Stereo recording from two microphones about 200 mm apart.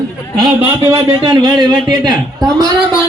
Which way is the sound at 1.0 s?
20° right (ahead or behind).